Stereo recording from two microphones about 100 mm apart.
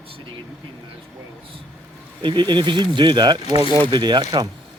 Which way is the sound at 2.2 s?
50° right (ahead or behind).